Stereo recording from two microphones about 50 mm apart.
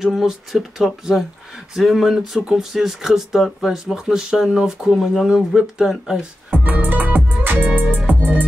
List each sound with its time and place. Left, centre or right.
0.0 s speech: centre
3.7 s speech: centre
6.5 s music: right